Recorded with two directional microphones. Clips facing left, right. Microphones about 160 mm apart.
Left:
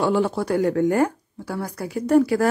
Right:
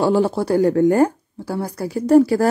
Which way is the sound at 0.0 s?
35° right (ahead or behind).